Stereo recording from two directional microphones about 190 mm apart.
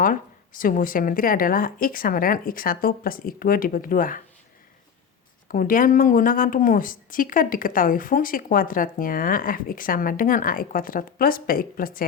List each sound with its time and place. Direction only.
0.0 s a woman's voice: 45° left (ahead or behind)
5.5 s a woman's voice: 45° left (ahead or behind)